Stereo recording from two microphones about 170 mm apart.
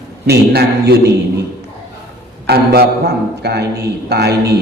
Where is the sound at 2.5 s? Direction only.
75° right (ahead or behind).